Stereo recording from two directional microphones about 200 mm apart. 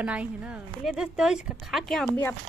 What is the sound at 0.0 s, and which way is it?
Speech, 5° right (ahead or behind).